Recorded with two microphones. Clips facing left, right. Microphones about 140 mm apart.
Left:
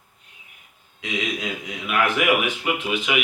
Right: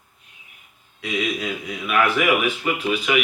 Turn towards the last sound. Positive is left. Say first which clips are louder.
# right 2 dB
turn(degrees=15)  # may be behind; listen again after turning